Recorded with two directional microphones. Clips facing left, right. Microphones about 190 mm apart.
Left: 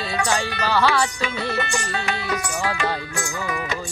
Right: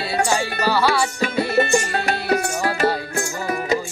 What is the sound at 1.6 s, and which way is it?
Music, 40° right (ahead or behind).